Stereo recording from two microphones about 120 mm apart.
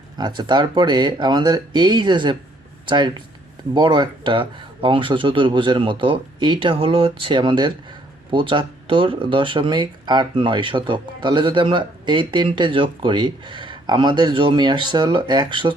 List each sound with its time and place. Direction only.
0.2 s speech: 35° right (ahead or behind)